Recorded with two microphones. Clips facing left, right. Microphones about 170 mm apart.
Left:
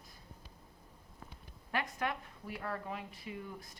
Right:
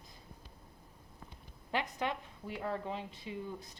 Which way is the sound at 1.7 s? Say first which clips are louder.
Right 1 dB; 20° right (ahead or behind).